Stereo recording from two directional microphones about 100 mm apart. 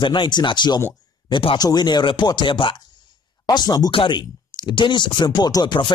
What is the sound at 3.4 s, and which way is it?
Speech, 45° left (ahead or behind).